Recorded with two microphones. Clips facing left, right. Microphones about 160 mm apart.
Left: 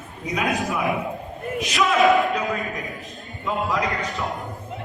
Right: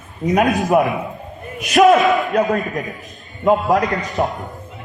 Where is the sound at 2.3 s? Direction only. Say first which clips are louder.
Right 8 dB; 50° right (ahead or behind).